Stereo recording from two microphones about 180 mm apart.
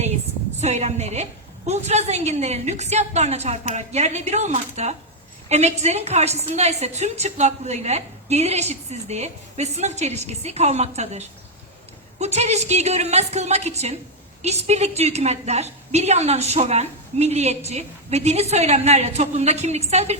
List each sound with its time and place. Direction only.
0.6 s a woman's voice: 35° right (ahead or behind)